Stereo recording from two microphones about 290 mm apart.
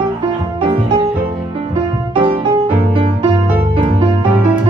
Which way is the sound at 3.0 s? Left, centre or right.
Centre.